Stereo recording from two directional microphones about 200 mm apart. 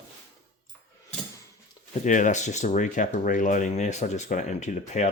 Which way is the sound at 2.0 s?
40° left (ahead or behind).